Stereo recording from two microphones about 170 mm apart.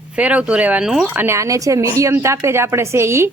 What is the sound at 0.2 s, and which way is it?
A woman's voice, 10° right (ahead or behind).